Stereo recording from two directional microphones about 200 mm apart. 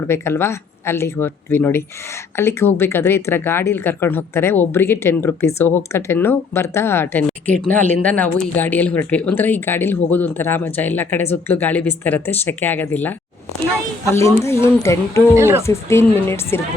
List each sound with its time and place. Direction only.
0.1 s speech: 10° left (ahead or behind)
15.4 s speech: 15° right (ahead or behind)
15.6 s speech: 15° left (ahead or behind)